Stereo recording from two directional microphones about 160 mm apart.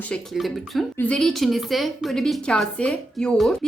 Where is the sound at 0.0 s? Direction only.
5° left (ahead or behind).